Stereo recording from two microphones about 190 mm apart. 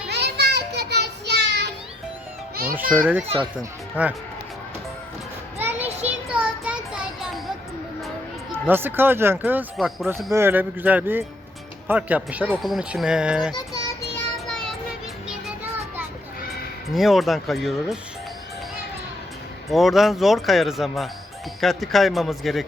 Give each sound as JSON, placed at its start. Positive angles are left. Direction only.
{"t": 0.1, "sound": "child singing", "side_deg": -60}
{"t": 2.9, "sound": "speech", "side_deg": -10}
{"t": 6.1, "sound": "a sound", "side_deg": -5}
{"t": 8.5, "sound": "speech", "side_deg": -10}
{"t": 13.5, "sound": "child singing", "side_deg": 20}
{"t": 14.4, "sound": "child singing", "side_deg": 5}
{"t": 15.3, "sound": "music", "side_deg": -10}
{"t": 16.9, "sound": "speech", "side_deg": 0}
{"t": 19.7, "sound": "speech", "side_deg": 0}